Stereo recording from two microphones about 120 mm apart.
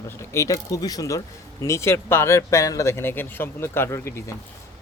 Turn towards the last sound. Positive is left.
turn(degrees=20)  # may be behind; listen again after turning